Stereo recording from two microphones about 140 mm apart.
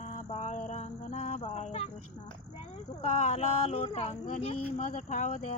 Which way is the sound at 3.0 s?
55° left (ahead or behind).